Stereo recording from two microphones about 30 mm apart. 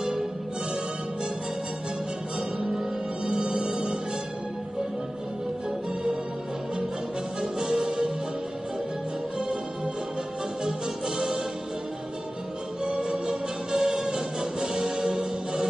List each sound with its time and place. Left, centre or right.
3.3 s music: right
7.6 s music: right
10.6 s music: centre
12.8 s music: right